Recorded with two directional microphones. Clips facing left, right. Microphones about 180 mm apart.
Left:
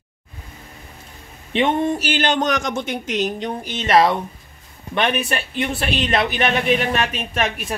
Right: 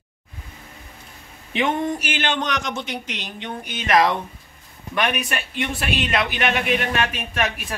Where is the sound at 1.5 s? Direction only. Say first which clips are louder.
Left 4 dB; 25° left (ahead or behind).